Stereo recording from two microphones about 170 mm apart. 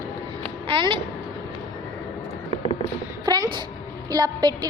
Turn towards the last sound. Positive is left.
turn(degrees=-20)  # may be behind; listen again after turning